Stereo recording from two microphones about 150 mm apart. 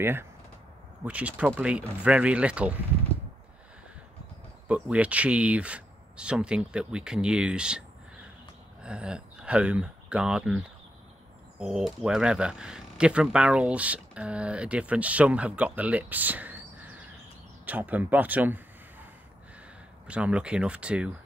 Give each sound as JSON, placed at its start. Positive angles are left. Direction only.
{"t": 0.0, "sound": "speech", "side_deg": -15}
{"t": 4.6, "sound": "speech", "side_deg": -10}
{"t": 8.8, "sound": "speech", "side_deg": -5}
{"t": 20.1, "sound": "speech", "side_deg": -5}